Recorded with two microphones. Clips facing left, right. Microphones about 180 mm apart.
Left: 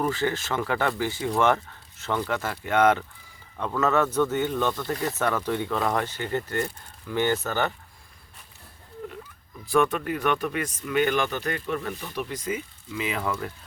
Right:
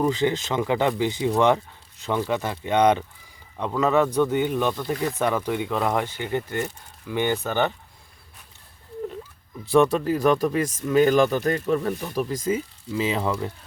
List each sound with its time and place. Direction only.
0.0 s speech: 15° right (ahead or behind)
9.7 s speech: 30° right (ahead or behind)